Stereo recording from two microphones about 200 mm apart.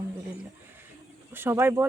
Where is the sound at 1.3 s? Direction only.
10° right (ahead or behind).